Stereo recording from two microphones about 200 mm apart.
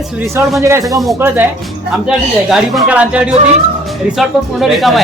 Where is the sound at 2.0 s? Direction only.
5° right (ahead or behind).